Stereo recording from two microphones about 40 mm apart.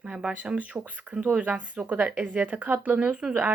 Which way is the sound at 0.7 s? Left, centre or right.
Right.